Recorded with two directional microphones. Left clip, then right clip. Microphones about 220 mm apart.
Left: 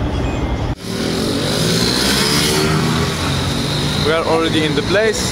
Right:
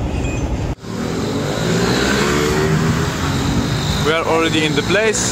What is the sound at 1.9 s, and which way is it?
Vehicle, 55° left (ahead or behind).